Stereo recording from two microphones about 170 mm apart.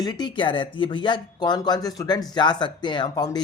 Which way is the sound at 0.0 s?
25° left (ahead or behind).